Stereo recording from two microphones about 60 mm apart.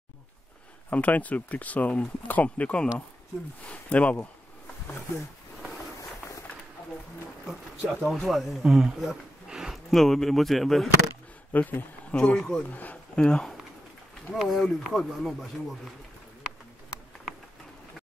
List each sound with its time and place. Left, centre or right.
0.8 s speech: left
7.9 s speech: centre
9.8 s speech: centre
11.5 s speech: left; by 12.6 s centre
12.6 s speech: left
13.1 s speech: centre
14.3 s speech: centre